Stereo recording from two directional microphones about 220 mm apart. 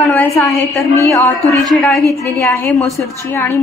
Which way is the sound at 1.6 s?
Centre (ahead or behind).